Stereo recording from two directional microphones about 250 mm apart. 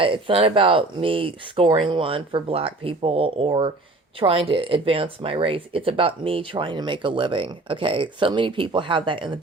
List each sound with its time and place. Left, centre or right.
0.0 s speech: right